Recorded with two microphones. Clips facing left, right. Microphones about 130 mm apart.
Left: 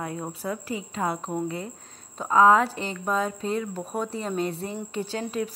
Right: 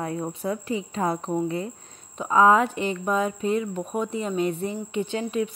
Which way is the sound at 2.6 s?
30° left (ahead or behind).